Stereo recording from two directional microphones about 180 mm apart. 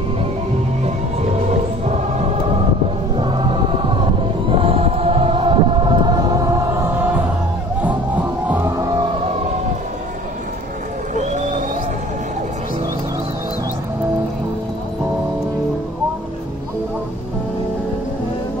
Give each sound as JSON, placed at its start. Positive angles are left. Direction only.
{"t": 4.5, "sound": "choir", "side_deg": -30}
{"t": 7.8, "sound": "music", "side_deg": -10}
{"t": 8.7, "sound": "music", "side_deg": -25}
{"t": 11.1, "sound": "a sound", "side_deg": -40}